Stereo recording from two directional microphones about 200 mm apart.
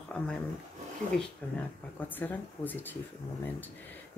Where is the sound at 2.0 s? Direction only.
10° left (ahead or behind).